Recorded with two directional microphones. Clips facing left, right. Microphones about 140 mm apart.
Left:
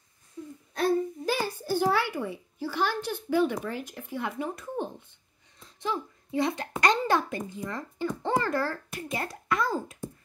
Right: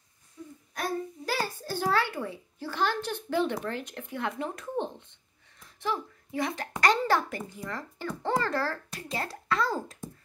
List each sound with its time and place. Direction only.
0.7 s babbling: 25° left (ahead or behind)
3.3 s speech: 10° left (ahead or behind)
5.6 s a child's voice: 20° left (ahead or behind)